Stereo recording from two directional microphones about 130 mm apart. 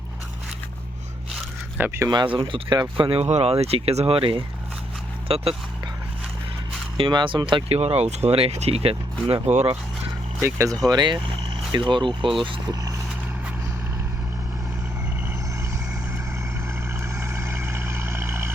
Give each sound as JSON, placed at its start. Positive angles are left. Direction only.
{"t": 1.8, "sound": "speech", "side_deg": -20}
{"t": 2.0, "sound": "speech", "side_deg": -35}
{"t": 6.9, "sound": "speech", "side_deg": -40}
{"t": 7.8, "sound": "speech", "side_deg": -55}
{"t": 10.4, "sound": "speech", "side_deg": -25}
{"t": 10.8, "sound": "speech", "side_deg": -35}
{"t": 17.0, "sound": "vehicle", "side_deg": -20}